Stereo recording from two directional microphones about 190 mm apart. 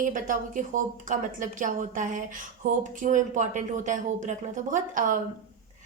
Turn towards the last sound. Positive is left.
turn(degrees=-45)  # may be behind; listen again after turning